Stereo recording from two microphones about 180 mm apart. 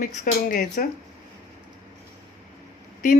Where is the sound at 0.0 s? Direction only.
50° left (ahead or behind).